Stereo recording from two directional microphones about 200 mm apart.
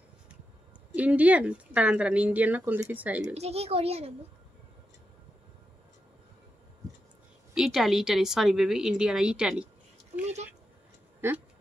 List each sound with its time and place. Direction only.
0.9 s speech: 5° right (ahead or behind)
3.3 s speech: 30° right (ahead or behind)
7.5 s a woman's voice: centre (ahead or behind)
11.1 s speech: 10° right (ahead or behind)